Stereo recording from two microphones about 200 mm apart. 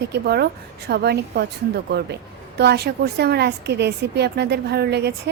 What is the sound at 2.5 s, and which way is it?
A woman's voice, 55° right (ahead or behind).